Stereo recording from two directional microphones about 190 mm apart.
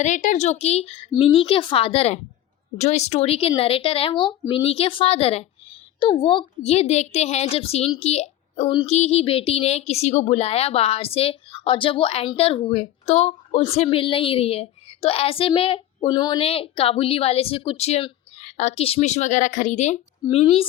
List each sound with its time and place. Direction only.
0.0 s a woman's voice: 40° left (ahead or behind)